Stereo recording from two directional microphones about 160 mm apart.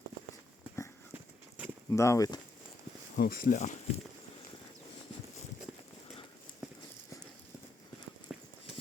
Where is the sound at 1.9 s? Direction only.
20° left (ahead or behind).